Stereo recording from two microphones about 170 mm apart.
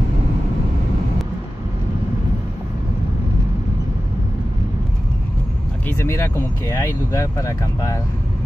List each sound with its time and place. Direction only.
5.9 s speech: 15° left (ahead or behind)